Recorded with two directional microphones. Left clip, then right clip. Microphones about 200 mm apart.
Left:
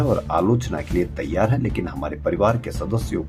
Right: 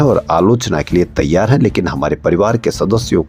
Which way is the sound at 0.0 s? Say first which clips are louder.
Right 9 dB; 40° right (ahead or behind).